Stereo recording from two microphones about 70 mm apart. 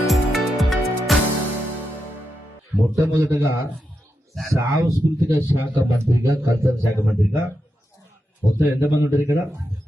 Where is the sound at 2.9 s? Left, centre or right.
Right.